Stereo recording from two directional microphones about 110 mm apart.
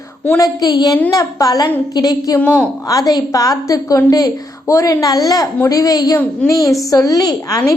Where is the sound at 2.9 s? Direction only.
35° left (ahead or behind).